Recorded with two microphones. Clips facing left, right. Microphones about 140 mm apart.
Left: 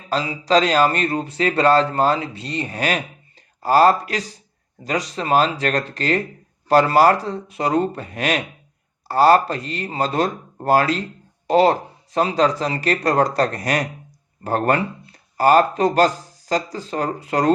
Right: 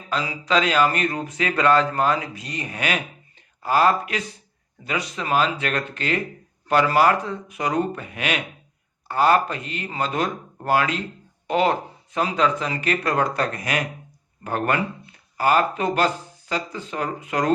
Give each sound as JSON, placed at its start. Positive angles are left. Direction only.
{"t": 0.1, "sound": "speech", "side_deg": 35}